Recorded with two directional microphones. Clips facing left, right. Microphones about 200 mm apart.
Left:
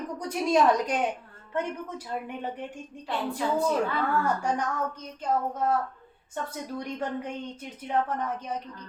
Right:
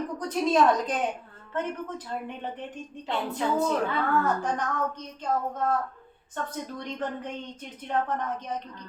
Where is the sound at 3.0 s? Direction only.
20° right (ahead or behind).